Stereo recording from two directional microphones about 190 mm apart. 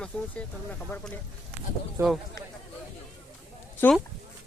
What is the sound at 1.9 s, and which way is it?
Speech, centre (ahead or behind).